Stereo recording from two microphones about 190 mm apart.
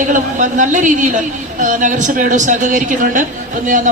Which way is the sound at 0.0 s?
40° right (ahead or behind).